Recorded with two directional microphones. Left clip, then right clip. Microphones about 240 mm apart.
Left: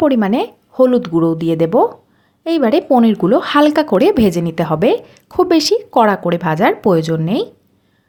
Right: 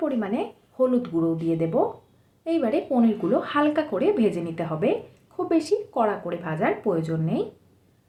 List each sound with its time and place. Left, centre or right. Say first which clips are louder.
0.0 s speech: left 12 dB; left